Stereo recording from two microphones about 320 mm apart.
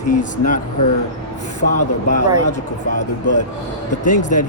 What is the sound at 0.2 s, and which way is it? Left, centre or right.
Speech, left.